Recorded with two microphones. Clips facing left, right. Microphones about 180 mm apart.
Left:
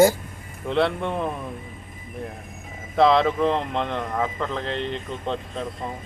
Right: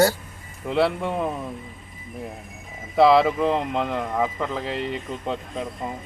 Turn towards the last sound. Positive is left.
turn(degrees=-5)  # may be behind; listen again after turning